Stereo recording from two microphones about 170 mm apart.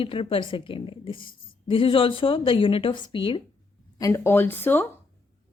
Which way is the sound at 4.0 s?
15° left (ahead or behind).